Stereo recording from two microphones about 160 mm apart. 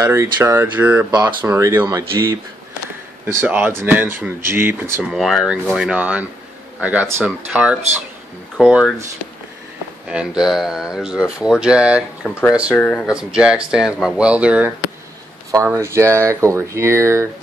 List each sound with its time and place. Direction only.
0.0 s speech: 15° right (ahead or behind)
5.1 s speech: centre (ahead or behind)
10.0 s speech: 5° right (ahead or behind)
12.7 s speech: 10° left (ahead or behind)
13.0 s speech: 5° right (ahead or behind)